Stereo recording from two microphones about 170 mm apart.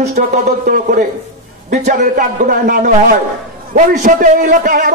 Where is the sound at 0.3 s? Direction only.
50° right (ahead or behind).